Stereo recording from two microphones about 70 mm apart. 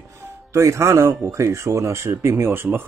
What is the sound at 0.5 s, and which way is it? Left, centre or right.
Speech, right.